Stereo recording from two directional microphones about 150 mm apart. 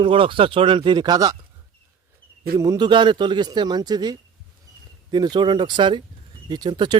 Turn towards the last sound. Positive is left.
turn(degrees=-30)  # may be behind; listen again after turning